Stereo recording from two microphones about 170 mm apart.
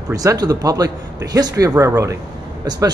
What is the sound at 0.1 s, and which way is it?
A woman's voice, 20° right (ahead or behind).